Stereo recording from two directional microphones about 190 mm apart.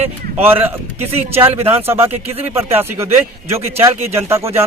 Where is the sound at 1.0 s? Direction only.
30° right (ahead or behind).